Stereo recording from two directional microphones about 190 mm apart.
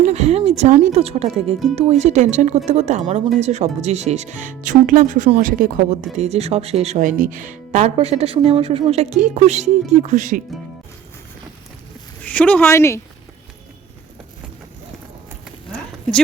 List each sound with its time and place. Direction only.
0.0 s speech: 35° right (ahead or behind)
12.2 s speech: 5° left (ahead or behind)